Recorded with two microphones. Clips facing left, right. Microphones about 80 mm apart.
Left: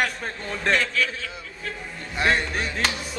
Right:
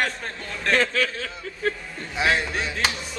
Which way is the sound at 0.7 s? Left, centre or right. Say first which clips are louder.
Right 3 dB; right.